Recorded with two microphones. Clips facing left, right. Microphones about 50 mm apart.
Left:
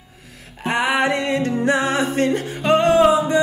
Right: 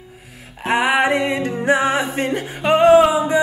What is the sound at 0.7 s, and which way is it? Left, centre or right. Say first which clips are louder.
Music: right 2 dB; centre.